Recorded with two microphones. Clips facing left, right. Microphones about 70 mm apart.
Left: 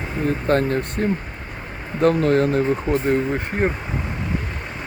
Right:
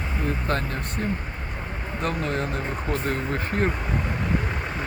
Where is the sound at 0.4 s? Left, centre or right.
Left.